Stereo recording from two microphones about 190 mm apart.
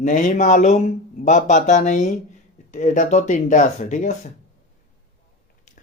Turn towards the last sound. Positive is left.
turn(degrees=40)  # may be behind; listen again after turning